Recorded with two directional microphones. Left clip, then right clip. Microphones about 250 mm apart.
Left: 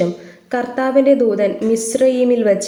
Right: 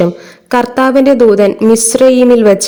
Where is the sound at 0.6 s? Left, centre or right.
Right.